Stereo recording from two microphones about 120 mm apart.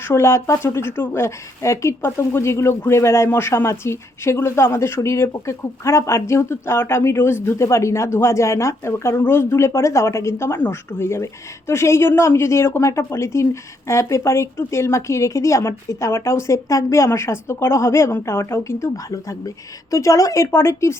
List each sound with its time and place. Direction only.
0.1 s speech: 25° left (ahead or behind)